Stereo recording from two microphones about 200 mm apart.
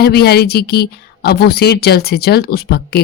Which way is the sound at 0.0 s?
55° left (ahead or behind).